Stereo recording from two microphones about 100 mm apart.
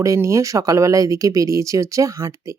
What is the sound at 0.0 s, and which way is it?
Speech, 30° right (ahead or behind).